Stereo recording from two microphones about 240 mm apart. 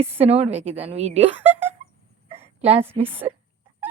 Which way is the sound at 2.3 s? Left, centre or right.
Right.